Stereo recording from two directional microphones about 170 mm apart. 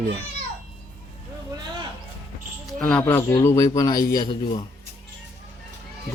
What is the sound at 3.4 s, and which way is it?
Speech, 15° left (ahead or behind).